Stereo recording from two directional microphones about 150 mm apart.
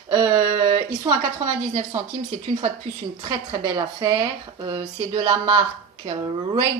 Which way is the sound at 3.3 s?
30° right (ahead or behind).